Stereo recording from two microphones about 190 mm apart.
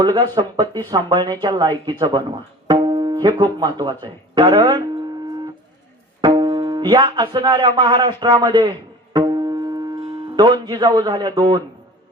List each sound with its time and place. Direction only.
0.0 s speech: 20° right (ahead or behind)
2.6 s tabla: 25° right (ahead or behind)
3.6 s speech: 20° right (ahead or behind)
6.2 s speech: 25° right (ahead or behind)
9.1 s music: 20° right (ahead or behind)